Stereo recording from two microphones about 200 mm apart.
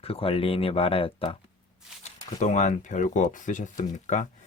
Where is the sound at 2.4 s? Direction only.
35° left (ahead or behind).